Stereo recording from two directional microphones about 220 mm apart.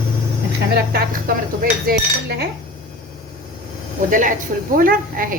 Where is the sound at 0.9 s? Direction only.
40° right (ahead or behind).